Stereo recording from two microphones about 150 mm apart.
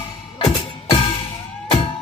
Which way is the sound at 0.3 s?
30° left (ahead or behind).